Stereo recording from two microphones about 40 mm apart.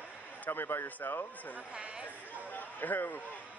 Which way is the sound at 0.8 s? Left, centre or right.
Left.